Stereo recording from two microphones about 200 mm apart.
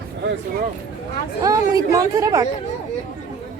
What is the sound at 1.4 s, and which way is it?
Speech, 15° right (ahead or behind).